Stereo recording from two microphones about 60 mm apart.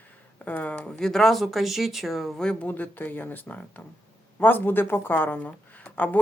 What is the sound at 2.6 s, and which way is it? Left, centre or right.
Speech, left.